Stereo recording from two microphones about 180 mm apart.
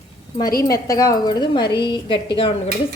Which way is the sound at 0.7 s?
20° left (ahead or behind).